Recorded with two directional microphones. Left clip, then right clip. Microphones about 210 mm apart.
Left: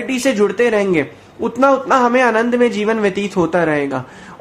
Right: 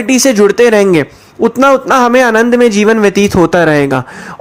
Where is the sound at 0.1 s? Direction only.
40° right (ahead or behind).